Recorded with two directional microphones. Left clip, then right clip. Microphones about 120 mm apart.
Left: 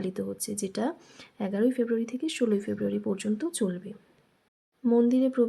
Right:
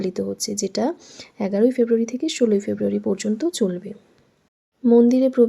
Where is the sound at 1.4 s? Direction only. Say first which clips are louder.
Right 9 dB; 40° right (ahead or behind).